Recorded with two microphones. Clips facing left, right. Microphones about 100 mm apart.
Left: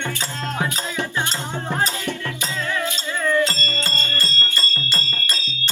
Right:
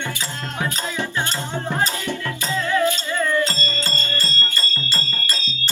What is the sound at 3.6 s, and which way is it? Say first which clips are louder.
Music: even; 15° right (ahead or behind).